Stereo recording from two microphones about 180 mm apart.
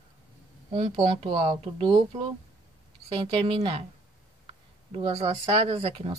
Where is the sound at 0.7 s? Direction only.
35° right (ahead or behind).